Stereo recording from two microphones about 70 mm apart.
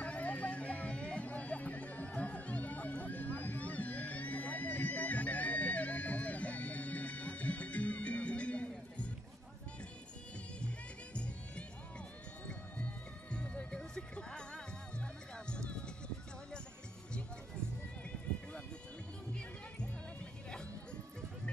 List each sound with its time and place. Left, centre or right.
0.0 s music: centre
12.4 s music: centre